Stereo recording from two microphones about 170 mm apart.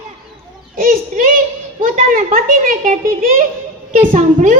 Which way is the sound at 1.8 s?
50° right (ahead or behind).